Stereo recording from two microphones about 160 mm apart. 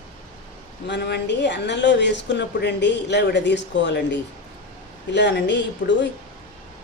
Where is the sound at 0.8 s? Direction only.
90° left.